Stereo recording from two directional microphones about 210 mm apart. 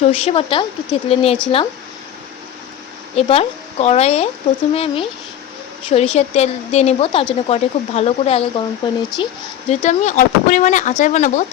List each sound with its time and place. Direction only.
0.0 s speech: 30° left (ahead or behind)
3.2 s speech: 30° left (ahead or behind)